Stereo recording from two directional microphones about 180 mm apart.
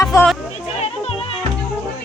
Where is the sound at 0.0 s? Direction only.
15° left (ahead or behind).